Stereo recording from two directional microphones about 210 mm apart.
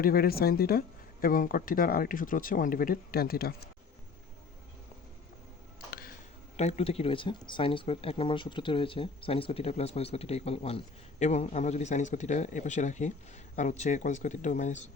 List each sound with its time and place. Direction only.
0.0 s speech: 45° left (ahead or behind)
6.6 s speech: 30° left (ahead or behind)